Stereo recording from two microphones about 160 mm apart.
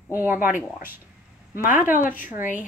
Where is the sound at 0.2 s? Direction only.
15° right (ahead or behind).